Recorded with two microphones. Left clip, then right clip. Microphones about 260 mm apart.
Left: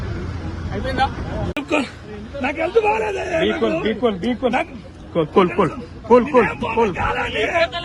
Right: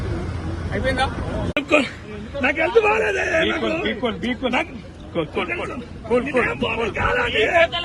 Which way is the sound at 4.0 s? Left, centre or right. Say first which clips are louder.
Left 4 dB; left.